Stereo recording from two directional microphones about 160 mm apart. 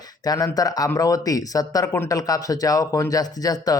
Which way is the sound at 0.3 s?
25° left (ahead or behind).